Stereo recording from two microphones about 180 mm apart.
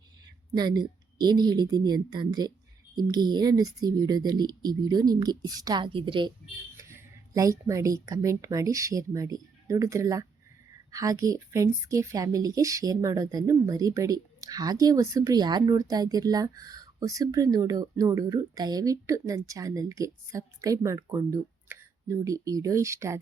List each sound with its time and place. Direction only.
0.5 s a woman's voice: 20° right (ahead or behind)
6.7 s a woman's voice: 15° right (ahead or behind)